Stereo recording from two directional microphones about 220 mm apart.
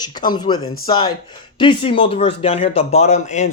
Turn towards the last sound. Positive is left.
turn(degrees=30)  # may be behind; listen again after turning